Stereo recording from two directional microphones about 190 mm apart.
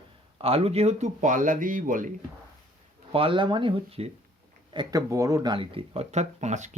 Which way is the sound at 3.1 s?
30° right (ahead or behind).